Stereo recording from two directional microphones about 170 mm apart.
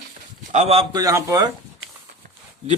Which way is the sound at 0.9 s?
20° right (ahead or behind).